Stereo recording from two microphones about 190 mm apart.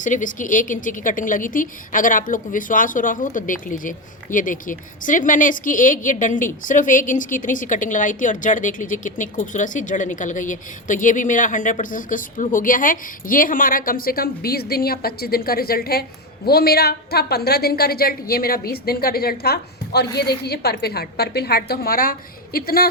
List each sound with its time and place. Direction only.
0.0 s a woman's voice: 40° left (ahead or behind)